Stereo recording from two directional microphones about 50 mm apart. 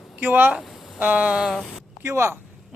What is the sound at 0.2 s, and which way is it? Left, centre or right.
Speech, right.